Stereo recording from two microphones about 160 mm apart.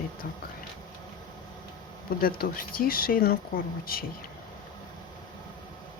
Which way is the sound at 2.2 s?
65° left (ahead or behind).